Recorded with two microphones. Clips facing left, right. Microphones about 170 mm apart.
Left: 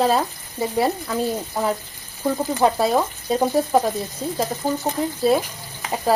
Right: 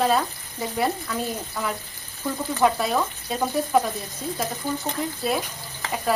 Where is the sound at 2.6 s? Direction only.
30° left (ahead or behind).